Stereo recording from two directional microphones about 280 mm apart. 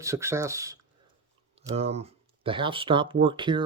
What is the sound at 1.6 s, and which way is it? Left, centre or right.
Speech, right.